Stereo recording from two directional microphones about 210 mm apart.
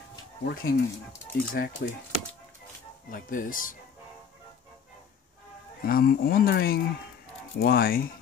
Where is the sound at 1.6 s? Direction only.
55° left (ahead or behind).